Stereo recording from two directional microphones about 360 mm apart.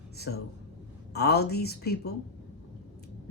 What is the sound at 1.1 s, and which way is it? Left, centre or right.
Speech, left.